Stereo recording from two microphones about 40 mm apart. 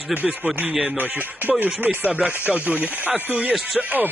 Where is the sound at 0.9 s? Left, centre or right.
Right.